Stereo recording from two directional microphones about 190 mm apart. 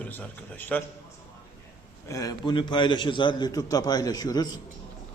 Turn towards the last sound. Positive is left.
turn(degrees=20)  # may be behind; listen again after turning